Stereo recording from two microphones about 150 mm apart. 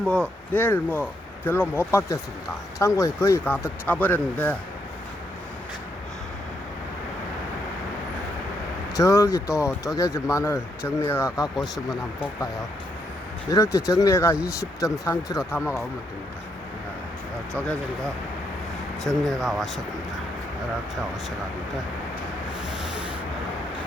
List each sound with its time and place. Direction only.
0.0 s speech: 5° left (ahead or behind)
9.0 s speech: 20° left (ahead or behind)
11.5 s speech: centre (ahead or behind)
13.5 s speech: 25° left (ahead or behind)
19.0 s speech: centre (ahead or behind)